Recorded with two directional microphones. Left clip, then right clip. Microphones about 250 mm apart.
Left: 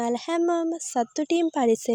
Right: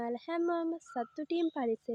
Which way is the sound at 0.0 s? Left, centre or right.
Left.